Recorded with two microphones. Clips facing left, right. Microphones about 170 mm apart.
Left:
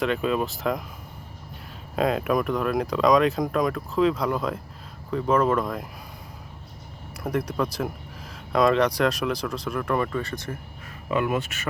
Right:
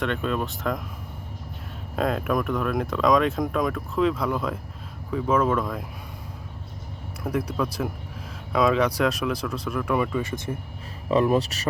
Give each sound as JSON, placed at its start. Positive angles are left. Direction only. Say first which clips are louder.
{"t": 0.0, "sound": "speech", "louder": "left 2 dB", "side_deg": 5}
{"t": 2.0, "sound": "speech", "louder": "left 2 dB", "side_deg": 0}
{"t": 7.2, "sound": "speech", "louder": "even", "side_deg": 0}
{"t": 11.1, "sound": "speech", "louder": "right 4 dB", "side_deg": -35}